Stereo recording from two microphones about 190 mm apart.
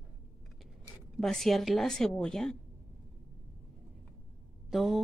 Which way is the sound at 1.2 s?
Centre (ahead or behind).